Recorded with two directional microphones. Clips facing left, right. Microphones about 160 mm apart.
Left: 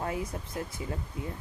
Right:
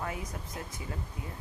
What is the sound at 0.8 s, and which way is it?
Speech, 25° left (ahead or behind).